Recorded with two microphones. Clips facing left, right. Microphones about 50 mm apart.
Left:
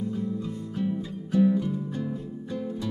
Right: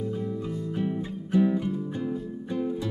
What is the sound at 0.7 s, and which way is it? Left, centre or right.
Music, right.